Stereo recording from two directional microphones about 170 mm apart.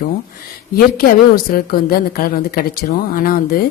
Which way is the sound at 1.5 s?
60° left (ahead or behind).